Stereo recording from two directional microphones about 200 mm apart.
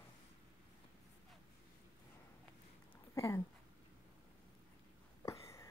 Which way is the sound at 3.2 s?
15° left (ahead or behind).